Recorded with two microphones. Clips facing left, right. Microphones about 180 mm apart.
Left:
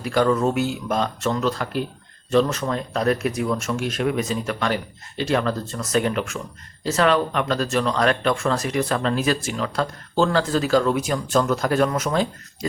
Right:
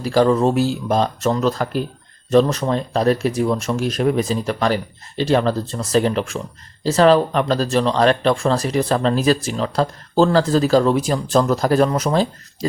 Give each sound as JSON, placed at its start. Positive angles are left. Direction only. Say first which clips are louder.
{"t": 0.0, "sound": "speech", "louder": "right 4 dB", "side_deg": -35}